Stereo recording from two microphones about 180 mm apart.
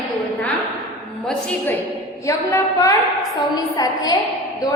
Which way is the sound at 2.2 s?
15° left (ahead or behind).